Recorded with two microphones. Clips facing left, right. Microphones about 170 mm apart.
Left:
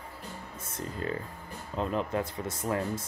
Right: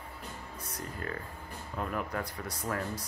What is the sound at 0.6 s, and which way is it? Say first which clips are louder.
Speech: left 5 dB; 25° left (ahead or behind).